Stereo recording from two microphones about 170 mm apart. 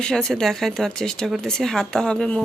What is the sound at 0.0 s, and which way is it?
Speech, 5° left (ahead or behind).